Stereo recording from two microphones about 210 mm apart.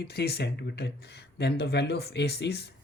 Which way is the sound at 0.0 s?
50° left (ahead or behind).